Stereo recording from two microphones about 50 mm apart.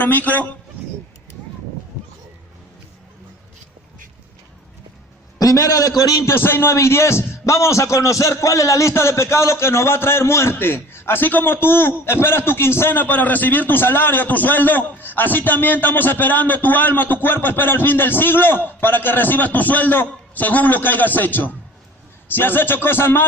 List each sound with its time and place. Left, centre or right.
0.0 s a man's voice: left
6.1 s a man's voice: left
6.7 s a man's voice: left
13.0 s a man's voice: left